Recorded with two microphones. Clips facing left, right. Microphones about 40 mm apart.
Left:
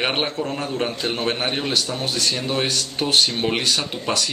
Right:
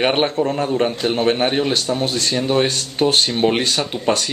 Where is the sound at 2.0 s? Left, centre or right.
Right.